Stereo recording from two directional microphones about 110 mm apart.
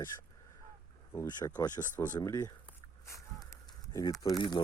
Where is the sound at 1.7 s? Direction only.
15° left (ahead or behind).